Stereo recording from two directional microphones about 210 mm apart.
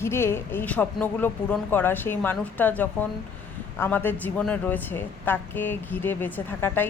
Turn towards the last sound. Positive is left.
turn(degrees=10)  # may be behind; listen again after turning